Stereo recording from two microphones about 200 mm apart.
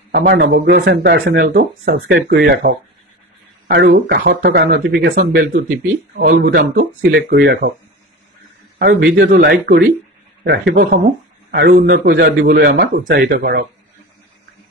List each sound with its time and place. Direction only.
0.1 s speech: 55° right (ahead or behind)
4.5 s speech: 60° right (ahead or behind)
6.1 s speech: 40° right (ahead or behind)
8.7 s a man's voice: 55° right (ahead or behind)